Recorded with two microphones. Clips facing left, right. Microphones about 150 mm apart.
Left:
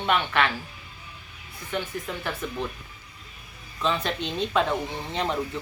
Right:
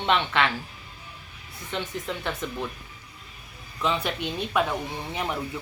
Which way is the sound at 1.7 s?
20° right (ahead or behind).